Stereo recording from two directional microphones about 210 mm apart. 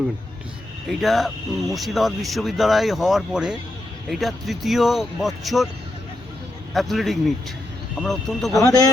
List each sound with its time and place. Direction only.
0.9 s speech: centre (ahead or behind)
6.7 s speech: centre (ahead or behind)
8.6 s a man's voice: 15° left (ahead or behind)